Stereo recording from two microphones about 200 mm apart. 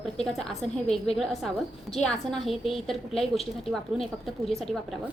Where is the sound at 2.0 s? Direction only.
Centre (ahead or behind).